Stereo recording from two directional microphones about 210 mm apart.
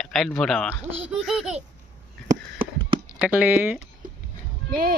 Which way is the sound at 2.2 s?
35° right (ahead or behind).